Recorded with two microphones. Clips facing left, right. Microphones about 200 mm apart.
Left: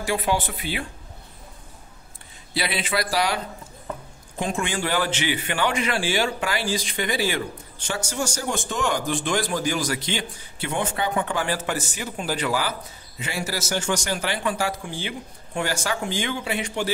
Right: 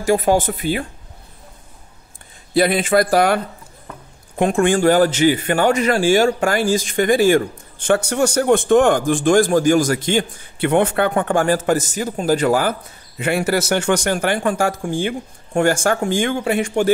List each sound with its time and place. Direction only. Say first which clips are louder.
0.0 s a man's voice: right 9 dB; 45° right (ahead or behind)
2.5 s a man's voice: right 11 dB; 50° right (ahead or behind)
13.2 s a man's voice: right 11 dB; 60° right (ahead or behind)